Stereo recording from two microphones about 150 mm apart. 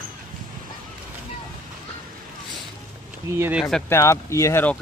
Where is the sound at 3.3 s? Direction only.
10° right (ahead or behind).